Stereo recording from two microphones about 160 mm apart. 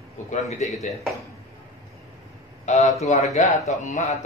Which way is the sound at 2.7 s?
45° left (ahead or behind).